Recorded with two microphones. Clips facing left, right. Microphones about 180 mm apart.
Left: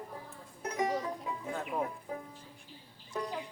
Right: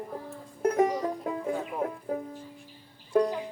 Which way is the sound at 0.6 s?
55° right (ahead or behind).